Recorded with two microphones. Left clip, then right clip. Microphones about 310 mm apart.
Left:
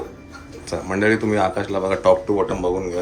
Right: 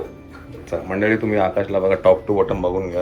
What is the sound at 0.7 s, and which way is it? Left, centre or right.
Speech, centre.